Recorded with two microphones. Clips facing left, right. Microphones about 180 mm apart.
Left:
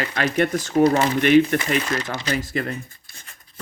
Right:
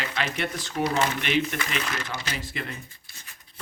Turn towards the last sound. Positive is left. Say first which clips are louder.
# left 3 dB
turn(degrees=50)  # may be behind; listen again after turning